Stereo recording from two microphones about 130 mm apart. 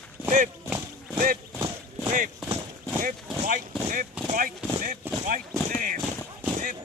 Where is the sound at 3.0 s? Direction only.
90° right.